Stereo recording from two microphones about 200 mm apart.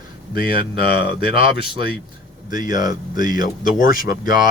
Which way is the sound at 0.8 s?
25° right (ahead or behind).